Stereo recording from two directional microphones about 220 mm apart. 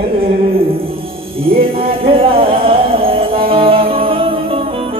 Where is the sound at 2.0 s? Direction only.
25° right (ahead or behind).